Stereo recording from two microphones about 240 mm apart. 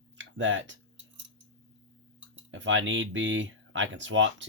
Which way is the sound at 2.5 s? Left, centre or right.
Right.